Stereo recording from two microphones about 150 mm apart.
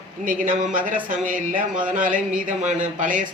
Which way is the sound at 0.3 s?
65° right (ahead or behind).